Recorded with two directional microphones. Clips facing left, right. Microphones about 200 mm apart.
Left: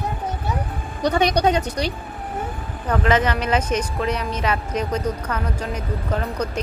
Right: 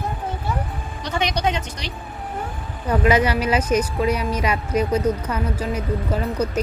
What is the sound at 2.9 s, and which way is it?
Speech, 10° right (ahead or behind).